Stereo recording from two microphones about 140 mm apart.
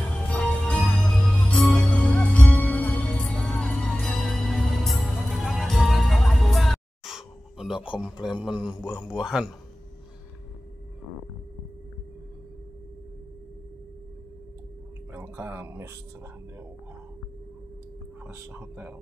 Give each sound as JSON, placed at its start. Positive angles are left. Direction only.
{"t": 0.1, "sound": "music", "side_deg": 10}
{"t": 8.0, "sound": "a man's voice", "side_deg": -5}
{"t": 15.1, "sound": "speech", "side_deg": -15}
{"t": 18.2, "sound": "speech", "side_deg": -10}